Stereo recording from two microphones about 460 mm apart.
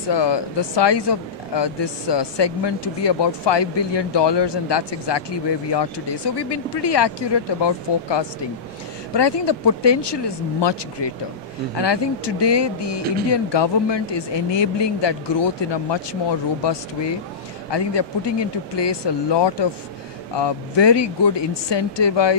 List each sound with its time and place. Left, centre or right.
0.1 s speech: left
17.6 s speech: left